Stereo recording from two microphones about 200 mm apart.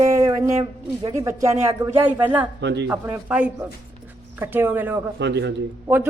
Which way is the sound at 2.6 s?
60° right (ahead or behind).